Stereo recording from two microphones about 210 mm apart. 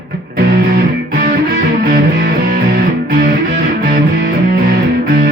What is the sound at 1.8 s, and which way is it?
Music, 45° right (ahead or behind).